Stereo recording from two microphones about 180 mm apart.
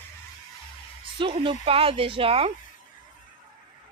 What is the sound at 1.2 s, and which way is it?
A woman's voice, 30° right (ahead or behind).